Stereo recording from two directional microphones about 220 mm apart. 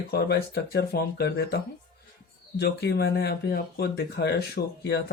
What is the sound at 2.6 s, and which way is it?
Speech, 50° left (ahead or behind).